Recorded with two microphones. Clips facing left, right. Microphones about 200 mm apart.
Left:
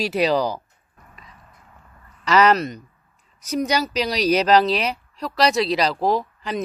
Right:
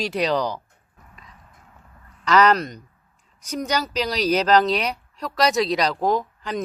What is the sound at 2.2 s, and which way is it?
Speech, 10° left (ahead or behind).